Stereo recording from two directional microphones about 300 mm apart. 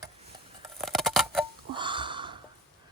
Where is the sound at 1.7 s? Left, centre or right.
Centre.